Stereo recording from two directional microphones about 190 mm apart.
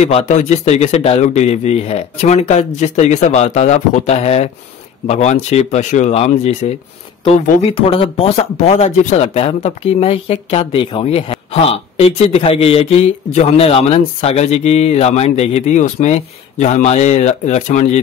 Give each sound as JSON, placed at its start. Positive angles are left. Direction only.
{"t": 0.0, "sound": "speech", "side_deg": 35}